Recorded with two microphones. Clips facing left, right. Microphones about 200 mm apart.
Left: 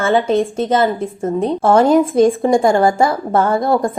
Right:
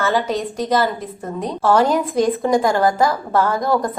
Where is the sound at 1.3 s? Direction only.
25° left (ahead or behind).